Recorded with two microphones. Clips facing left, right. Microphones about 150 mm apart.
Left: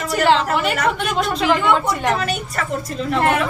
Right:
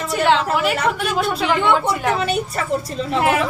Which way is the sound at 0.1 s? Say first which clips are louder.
Left 1 dB; centre (ahead or behind).